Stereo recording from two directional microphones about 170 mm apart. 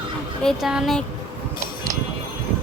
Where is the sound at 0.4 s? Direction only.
5° right (ahead or behind).